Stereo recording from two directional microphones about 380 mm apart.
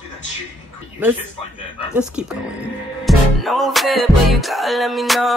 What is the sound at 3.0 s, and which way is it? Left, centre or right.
Music, centre.